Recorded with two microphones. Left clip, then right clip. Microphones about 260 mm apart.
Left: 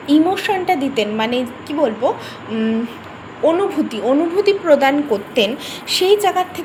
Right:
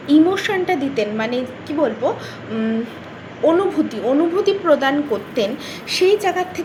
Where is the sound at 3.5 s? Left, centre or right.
Centre.